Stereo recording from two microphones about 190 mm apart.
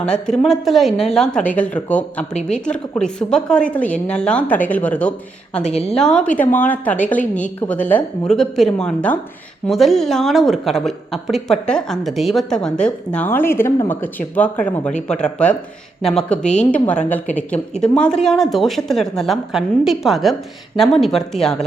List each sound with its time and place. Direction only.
0.0 s a woman's voice: 5° left (ahead or behind)